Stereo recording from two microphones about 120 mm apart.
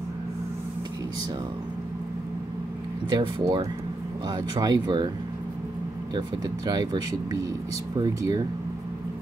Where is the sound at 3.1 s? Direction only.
40° right (ahead or behind).